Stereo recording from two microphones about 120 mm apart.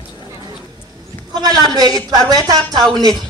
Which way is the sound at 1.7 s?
30° right (ahead or behind).